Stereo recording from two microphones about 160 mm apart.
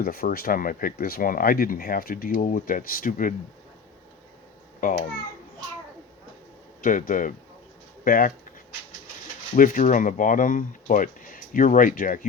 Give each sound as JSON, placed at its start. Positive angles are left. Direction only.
{"t": 0.0, "sound": "speech", "side_deg": 65}
{"t": 6.8, "sound": "speech", "side_deg": 55}
{"t": 9.6, "sound": "speech", "side_deg": 55}